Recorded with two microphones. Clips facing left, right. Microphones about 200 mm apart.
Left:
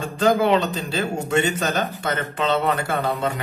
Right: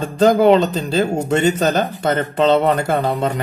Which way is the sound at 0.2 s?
40° right (ahead or behind).